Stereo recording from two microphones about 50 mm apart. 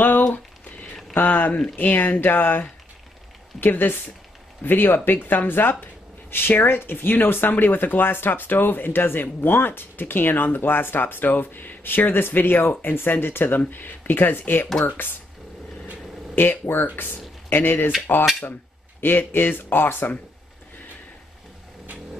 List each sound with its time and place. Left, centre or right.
1.1 s speech: left
3.6 s speech: left
16.3 s speech: left
18.9 s speech: left